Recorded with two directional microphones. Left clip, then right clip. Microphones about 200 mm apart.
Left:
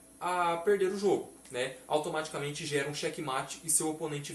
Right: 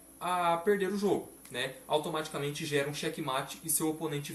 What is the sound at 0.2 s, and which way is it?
Speech, 10° left (ahead or behind).